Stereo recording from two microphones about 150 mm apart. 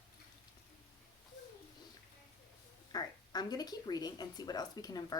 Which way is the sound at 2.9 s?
25° left (ahead or behind).